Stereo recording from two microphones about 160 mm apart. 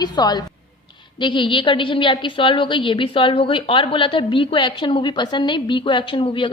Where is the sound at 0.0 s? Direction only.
25° left (ahead or behind).